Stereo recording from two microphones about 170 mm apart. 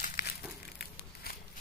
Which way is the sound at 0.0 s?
50° left (ahead or behind).